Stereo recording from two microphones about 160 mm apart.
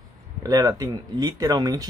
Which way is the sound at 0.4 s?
25° right (ahead or behind).